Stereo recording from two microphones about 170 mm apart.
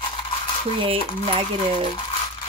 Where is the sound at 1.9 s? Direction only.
30° left (ahead or behind).